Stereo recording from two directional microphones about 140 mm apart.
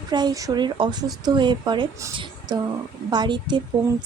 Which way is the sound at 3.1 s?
30° right (ahead or behind).